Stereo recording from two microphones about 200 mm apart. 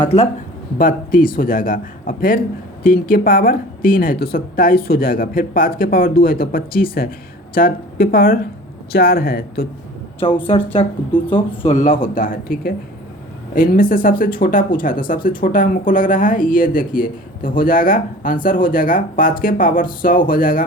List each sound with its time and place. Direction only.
0.0 s speech: 30° left (ahead or behind)
0.8 s speech: 45° left (ahead or behind)
10.8 s speech: 25° left (ahead or behind); by 20.7 s 45° left (ahead or behind)